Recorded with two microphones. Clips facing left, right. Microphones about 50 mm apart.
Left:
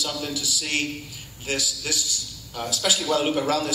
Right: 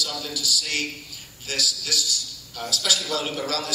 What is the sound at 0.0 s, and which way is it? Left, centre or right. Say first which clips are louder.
A man's voice: left 1 dB; left.